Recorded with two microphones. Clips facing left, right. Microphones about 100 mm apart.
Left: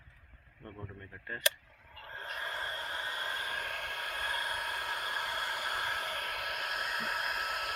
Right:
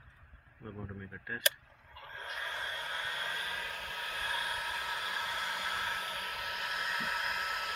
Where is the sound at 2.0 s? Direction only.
40° left (ahead or behind).